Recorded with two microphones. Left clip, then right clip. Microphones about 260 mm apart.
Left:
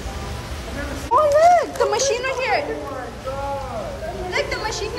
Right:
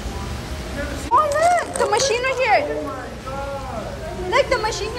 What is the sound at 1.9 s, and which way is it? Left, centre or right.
Speech, centre.